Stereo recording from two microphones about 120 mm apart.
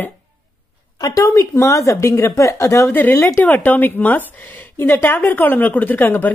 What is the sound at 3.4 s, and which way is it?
A woman's voice, 15° left (ahead or behind).